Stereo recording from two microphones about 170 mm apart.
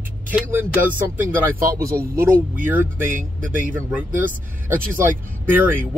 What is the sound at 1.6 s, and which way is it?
Speech, 20° right (ahead or behind).